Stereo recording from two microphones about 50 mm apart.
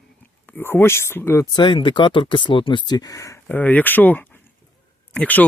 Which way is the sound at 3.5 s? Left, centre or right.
Left.